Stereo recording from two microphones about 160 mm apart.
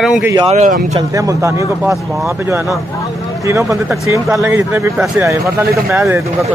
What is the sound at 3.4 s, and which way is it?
Speech, 20° right (ahead or behind).